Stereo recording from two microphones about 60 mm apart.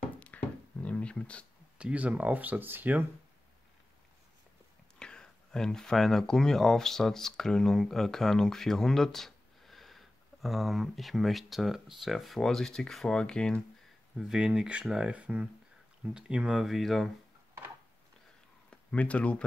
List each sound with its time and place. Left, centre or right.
0.2 s a sound: left
1.8 s speech: right
4.9 s speech: centre
14.1 s speech: centre
16.6 s speech: centre
18.7 s speech: centre